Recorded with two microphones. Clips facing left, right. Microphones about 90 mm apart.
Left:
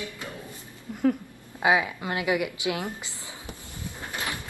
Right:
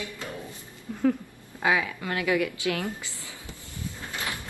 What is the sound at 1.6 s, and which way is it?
A woman's voice, 20° left (ahead or behind).